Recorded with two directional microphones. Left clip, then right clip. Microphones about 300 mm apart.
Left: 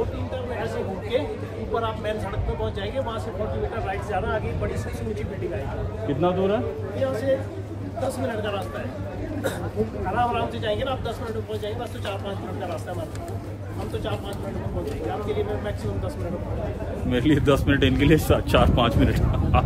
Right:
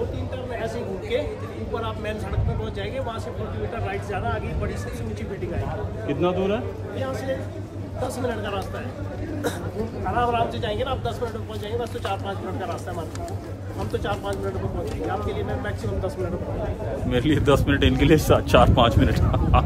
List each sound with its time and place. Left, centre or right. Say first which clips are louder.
6.2 s a man's voice: left 1 dB; centre
8.3 s speech: even; centre
10.1 s speech: right 2 dB; centre
15.2 s speech: left 2 dB; centre
17.1 s speech: even; centre